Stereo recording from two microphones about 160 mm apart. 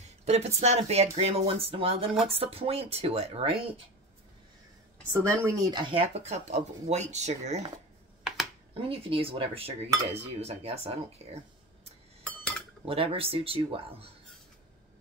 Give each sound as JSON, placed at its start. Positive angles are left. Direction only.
{"t": 0.0, "sound": "speech", "side_deg": -45}
{"t": 5.1, "sound": "speech", "side_deg": -15}
{"t": 8.7, "sound": "speech", "side_deg": -35}
{"t": 12.2, "sound": "cutlery", "side_deg": 5}
{"t": 12.8, "sound": "speech", "side_deg": -35}